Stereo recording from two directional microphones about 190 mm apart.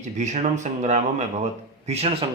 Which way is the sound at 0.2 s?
40° right (ahead or behind).